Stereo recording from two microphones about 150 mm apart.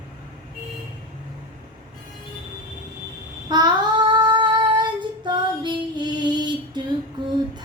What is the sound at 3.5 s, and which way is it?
Female singing, 30° right (ahead or behind).